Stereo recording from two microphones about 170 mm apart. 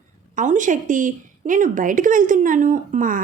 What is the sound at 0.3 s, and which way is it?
Speech, 50° right (ahead or behind).